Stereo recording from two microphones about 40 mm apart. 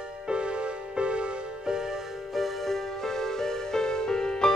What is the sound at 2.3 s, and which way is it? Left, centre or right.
Music, centre.